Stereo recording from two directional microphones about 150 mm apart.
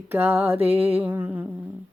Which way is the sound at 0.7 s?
10° right (ahead or behind).